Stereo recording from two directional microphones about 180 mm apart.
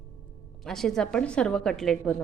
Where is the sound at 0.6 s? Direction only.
Centre (ahead or behind).